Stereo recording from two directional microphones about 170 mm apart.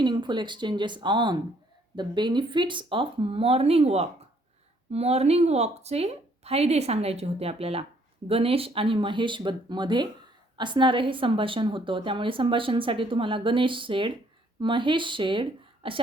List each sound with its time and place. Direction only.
0.0 s a woman's voice: 25° right (ahead or behind)